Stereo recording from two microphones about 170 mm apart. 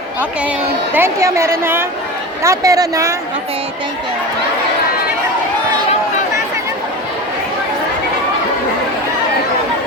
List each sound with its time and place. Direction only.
0.9 s a woman's voice: 15° right (ahead or behind)